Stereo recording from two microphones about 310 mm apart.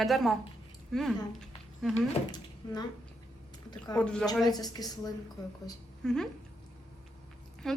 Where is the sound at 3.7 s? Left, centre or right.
Centre.